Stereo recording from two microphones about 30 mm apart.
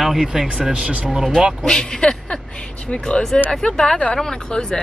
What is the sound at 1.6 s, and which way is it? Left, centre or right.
Speech, left.